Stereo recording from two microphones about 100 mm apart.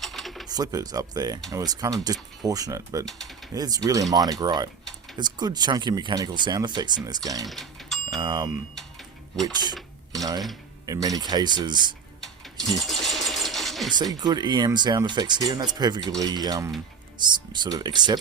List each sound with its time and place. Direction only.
0.0 s a sound: centre (ahead or behind)
0.4 s speech: 40° right (ahead or behind)
3.1 s typing: 5° left (ahead or behind)
3.5 s speech: 40° right (ahead or behind)
7.4 s a sound: centre (ahead or behind)
8.1 s speech: 45° right (ahead or behind)
9.5 s speech: 45° right (ahead or behind)
10.8 s speech: 35° right (ahead or behind)
12.2 s sewing machine: 5° left (ahead or behind)
13.9 s speech: 45° right (ahead or behind)